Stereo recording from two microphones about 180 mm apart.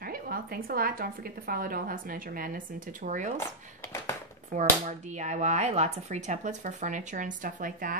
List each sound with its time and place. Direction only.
0.0 s speech: 55° right (ahead or behind)
4.6 s speech: 40° right (ahead or behind)